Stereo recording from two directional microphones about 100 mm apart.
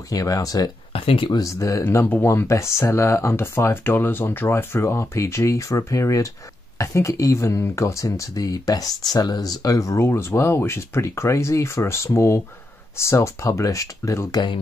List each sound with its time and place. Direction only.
0.1 s speech: 35° left (ahead or behind)
0.9 s speech: 65° left (ahead or behind)
1.3 s speech: 35° left (ahead or behind)